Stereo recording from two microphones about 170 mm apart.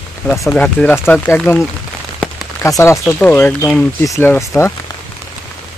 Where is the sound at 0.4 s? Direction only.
10° left (ahead or behind).